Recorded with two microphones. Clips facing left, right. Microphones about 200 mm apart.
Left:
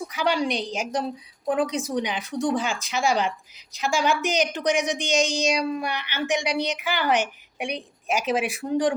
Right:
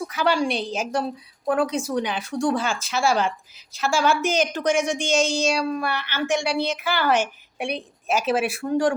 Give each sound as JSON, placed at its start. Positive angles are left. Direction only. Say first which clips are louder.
{"t": 0.1, "sound": "speech", "louder": "right 2 dB", "side_deg": 15}